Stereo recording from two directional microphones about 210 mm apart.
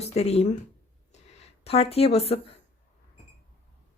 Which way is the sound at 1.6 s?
30° left (ahead or behind).